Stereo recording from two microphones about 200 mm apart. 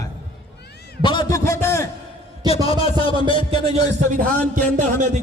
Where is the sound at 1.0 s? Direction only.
25° left (ahead or behind).